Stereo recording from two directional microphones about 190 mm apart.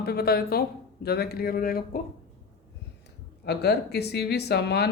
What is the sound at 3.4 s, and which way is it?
Speech, 60° left (ahead or behind).